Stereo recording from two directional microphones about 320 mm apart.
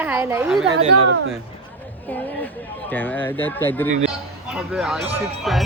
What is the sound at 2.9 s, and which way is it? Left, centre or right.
Speech, centre.